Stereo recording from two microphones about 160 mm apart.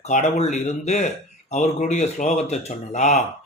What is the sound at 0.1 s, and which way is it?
Speech, 45° left (ahead or behind).